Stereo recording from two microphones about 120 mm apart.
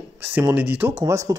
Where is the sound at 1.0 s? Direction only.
25° right (ahead or behind).